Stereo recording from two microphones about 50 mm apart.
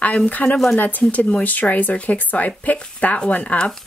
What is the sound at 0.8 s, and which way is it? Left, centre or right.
Speech, left.